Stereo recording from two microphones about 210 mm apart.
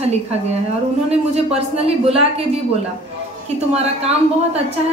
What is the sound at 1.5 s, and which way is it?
Speech, 30° right (ahead or behind).